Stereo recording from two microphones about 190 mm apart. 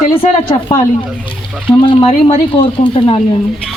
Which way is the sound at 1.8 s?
30° left (ahead or behind).